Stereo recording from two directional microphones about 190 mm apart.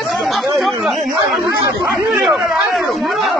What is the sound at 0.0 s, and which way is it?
Chatter, centre (ahead or behind).